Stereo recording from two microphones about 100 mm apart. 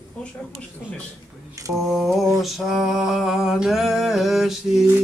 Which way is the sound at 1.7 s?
Centre (ahead or behind).